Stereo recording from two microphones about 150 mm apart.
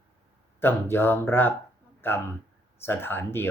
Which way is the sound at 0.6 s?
15° left (ahead or behind).